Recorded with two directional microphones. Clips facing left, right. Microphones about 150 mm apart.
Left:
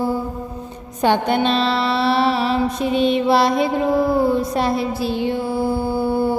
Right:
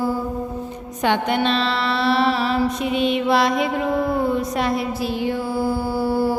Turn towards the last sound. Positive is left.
turn(degrees=25)  # may be behind; listen again after turning